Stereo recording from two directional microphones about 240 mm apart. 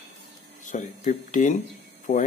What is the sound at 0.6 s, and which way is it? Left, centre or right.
Speech, left.